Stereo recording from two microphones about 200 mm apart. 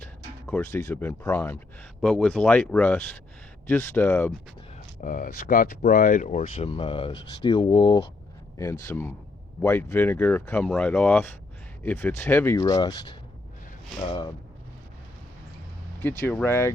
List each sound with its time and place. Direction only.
0.0 s speech: 5° left (ahead or behind)
4.9 s speech: 40° left (ahead or behind); by 8.0 s 25° left (ahead or behind)
8.9 s speech: 10° left (ahead or behind)
16.0 s speech: 10° left (ahead or behind)